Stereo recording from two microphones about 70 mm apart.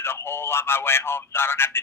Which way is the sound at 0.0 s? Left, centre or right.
Left.